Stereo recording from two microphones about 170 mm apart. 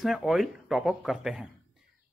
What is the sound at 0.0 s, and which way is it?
Speech, centre (ahead or behind).